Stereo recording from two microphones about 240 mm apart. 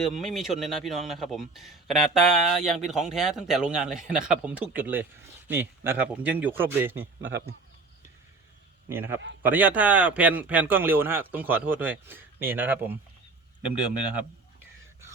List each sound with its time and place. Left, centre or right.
0.2 s a man's voice: centre
7.2 s a man's voice: right
8.9 s speech: centre